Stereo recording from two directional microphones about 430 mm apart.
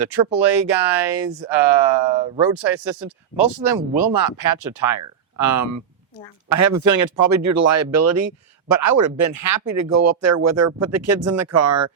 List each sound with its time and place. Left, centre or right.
0.0 s speech: right
2.1 s speech: centre
2.4 s speech: right